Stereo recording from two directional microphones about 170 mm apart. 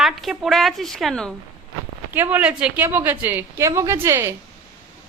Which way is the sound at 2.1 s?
10° right (ahead or behind).